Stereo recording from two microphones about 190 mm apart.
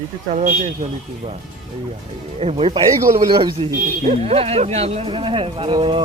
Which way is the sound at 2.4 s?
30° right (ahead or behind).